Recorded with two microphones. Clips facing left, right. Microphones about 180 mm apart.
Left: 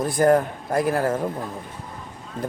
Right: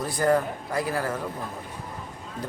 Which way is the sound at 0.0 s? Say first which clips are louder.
Left 5 dB; 50° left (ahead or behind).